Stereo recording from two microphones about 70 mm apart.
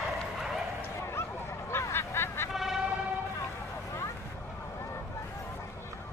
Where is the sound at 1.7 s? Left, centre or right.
Left.